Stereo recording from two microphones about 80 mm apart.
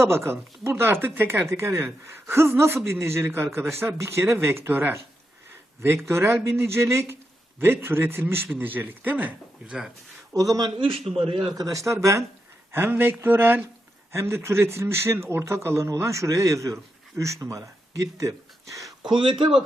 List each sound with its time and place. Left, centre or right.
0.0 s speech: right
10.3 s speech: right
10.8 s a man's voice: right
11.5 s speech: right
12.7 s speech: right